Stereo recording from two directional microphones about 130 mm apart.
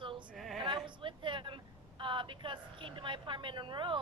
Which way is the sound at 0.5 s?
40° right (ahead or behind).